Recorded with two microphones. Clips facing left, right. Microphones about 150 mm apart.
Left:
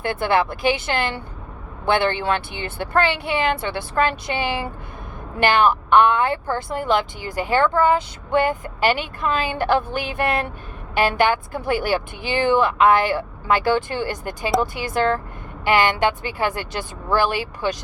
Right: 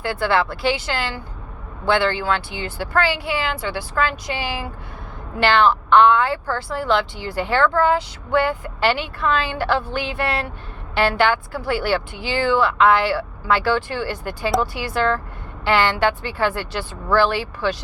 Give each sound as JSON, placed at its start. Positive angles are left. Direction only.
{"t": 0.0, "sound": "a woman's voice", "side_deg": 20}